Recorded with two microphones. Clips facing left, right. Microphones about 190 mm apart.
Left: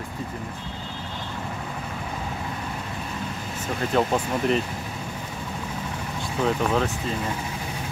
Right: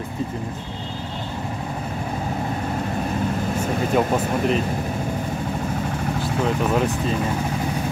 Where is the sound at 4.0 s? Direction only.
Centre (ahead or behind).